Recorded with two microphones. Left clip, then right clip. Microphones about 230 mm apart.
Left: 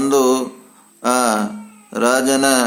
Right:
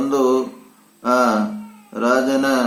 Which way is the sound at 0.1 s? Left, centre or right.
Left.